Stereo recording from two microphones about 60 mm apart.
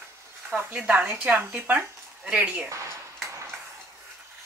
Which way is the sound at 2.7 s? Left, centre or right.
Right.